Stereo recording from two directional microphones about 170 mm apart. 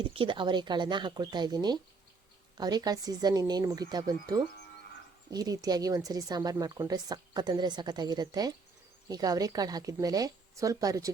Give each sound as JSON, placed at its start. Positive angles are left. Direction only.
{"t": 0.0, "sound": "a woman's voice", "side_deg": -30}